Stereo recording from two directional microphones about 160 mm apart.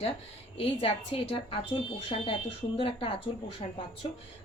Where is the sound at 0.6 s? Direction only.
35° left (ahead or behind).